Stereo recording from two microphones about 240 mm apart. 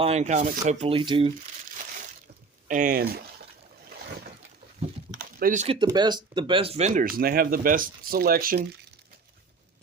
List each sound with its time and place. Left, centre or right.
0.0 s speech: right
2.6 s speech: right
5.1 s typing: right
5.8 s speech: centre; by 8.6 s right